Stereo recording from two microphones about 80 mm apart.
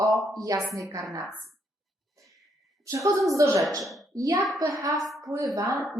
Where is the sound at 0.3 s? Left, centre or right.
Right.